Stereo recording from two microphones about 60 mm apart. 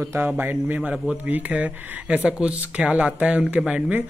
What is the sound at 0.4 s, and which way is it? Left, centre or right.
Speech, right.